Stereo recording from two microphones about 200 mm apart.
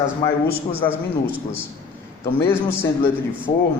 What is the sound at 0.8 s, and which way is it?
Speech, 15° left (ahead or behind).